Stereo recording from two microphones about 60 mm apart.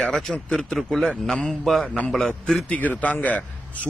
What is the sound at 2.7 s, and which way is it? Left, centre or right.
Speech, left.